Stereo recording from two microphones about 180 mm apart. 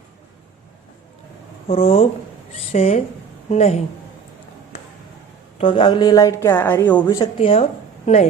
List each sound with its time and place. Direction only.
1.6 s speech: 35° left (ahead or behind)
5.5 s a woman's voice: 30° left (ahead or behind); by 7.0 s 10° left (ahead or behind)
7.1 s speech: 25° left (ahead or behind)